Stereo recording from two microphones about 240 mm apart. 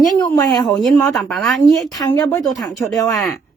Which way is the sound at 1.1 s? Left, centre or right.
Centre.